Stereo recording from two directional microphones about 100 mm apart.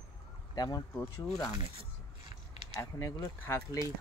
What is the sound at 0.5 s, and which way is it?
Speech, 40° left (ahead or behind).